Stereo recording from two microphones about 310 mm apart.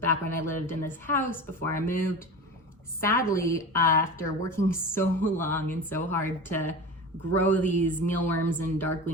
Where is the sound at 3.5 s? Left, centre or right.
Centre.